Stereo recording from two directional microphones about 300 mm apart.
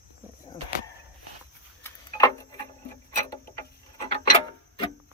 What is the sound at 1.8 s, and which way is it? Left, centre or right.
Tick-tock, centre.